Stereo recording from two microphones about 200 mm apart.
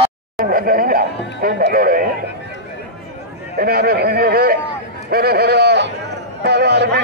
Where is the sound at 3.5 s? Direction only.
50° right (ahead or behind).